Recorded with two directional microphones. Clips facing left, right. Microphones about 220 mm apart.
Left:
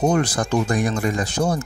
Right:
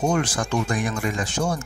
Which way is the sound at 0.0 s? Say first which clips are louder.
Left 3 dB; 35° left (ahead or behind).